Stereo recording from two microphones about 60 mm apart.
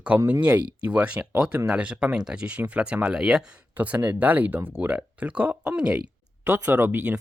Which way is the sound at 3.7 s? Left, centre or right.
Right.